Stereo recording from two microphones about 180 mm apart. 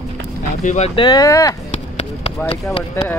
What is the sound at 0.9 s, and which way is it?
Speech, 20° left (ahead or behind).